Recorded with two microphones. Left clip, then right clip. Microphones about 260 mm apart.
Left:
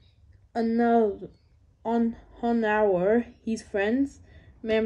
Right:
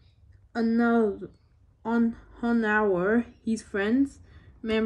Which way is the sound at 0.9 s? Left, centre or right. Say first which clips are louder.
Left 2 dB; centre.